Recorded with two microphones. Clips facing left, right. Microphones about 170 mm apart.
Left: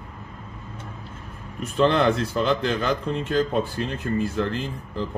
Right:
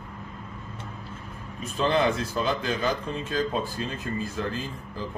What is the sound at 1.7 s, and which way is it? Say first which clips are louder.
Speech: left 4 dB; 65° left (ahead or behind).